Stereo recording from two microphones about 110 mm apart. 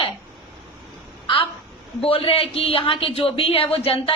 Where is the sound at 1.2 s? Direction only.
50° left (ahead or behind).